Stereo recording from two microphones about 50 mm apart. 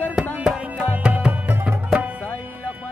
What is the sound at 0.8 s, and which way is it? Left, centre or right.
Music, right.